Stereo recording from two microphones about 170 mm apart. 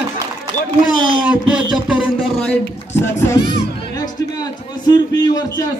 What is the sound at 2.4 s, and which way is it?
A man's voice, 10° left (ahead or behind).